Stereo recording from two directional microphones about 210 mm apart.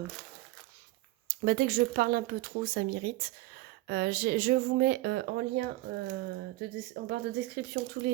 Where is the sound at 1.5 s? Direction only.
50° right (ahead or behind).